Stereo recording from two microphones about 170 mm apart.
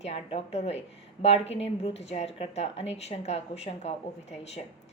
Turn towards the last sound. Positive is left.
turn(degrees=40)  # may be behind; listen again after turning